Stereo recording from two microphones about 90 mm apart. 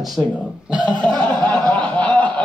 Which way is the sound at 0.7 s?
10° right (ahead or behind).